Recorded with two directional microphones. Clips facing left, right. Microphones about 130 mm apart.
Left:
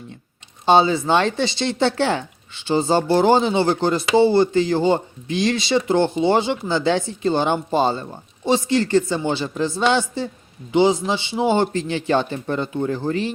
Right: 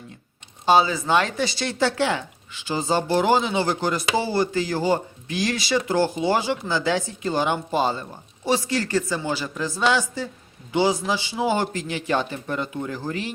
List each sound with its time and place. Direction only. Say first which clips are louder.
0.6 s speech: left 3 dB; 25° left (ahead or behind)